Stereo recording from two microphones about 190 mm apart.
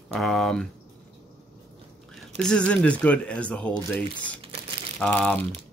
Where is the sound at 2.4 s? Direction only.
5° left (ahead or behind).